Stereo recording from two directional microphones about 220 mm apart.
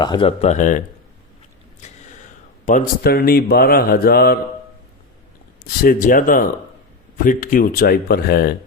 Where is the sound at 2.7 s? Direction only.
40° left (ahead or behind).